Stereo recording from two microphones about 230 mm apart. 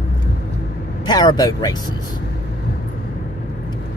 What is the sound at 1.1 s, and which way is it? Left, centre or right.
Speech, centre.